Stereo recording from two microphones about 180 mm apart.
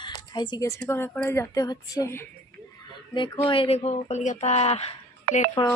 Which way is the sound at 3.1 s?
25° left (ahead or behind).